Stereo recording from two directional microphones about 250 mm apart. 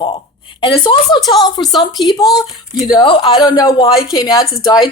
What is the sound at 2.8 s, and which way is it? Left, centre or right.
A woman's voice, centre.